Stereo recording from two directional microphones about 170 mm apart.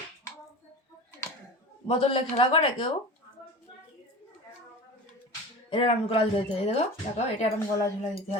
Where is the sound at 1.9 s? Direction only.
35° left (ahead or behind).